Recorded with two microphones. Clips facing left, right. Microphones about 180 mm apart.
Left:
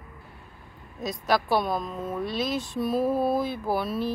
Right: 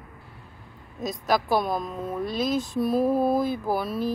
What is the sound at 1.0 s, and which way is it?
Speech, centre (ahead or behind).